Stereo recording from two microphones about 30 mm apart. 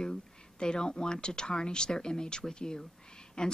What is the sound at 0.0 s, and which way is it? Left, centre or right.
A woman's voice, left.